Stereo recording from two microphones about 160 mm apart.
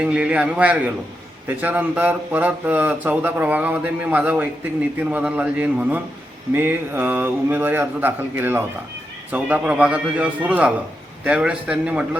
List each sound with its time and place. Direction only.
0.0 s speech: 5° right (ahead or behind)